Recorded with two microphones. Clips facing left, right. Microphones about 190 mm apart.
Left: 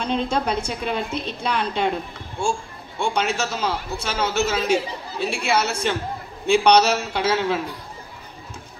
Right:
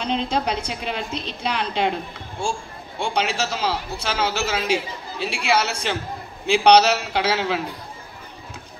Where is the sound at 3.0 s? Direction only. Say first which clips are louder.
Left 1 dB; 50° left (ahead or behind).